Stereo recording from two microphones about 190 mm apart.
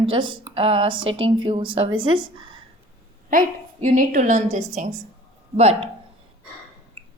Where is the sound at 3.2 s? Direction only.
40° right (ahead or behind).